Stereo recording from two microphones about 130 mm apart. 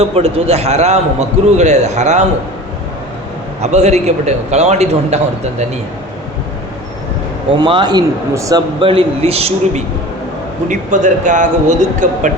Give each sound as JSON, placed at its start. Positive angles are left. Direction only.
{"t": 0.0, "sound": "a man's voice", "side_deg": -55}
{"t": 3.6, "sound": "a man's voice", "side_deg": -60}
{"t": 7.6, "sound": "a man's voice", "side_deg": -35}
{"t": 8.3, "sound": "speech", "side_deg": -25}
{"t": 8.8, "sound": "a man's voice", "side_deg": -45}
{"t": 10.7, "sound": "a man's voice", "side_deg": -70}